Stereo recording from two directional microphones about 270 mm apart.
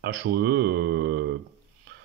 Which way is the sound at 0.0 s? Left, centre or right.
Right.